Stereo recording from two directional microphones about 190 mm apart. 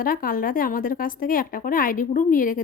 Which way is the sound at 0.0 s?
50° left (ahead or behind).